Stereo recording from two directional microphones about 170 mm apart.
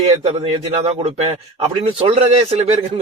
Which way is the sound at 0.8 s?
35° right (ahead or behind).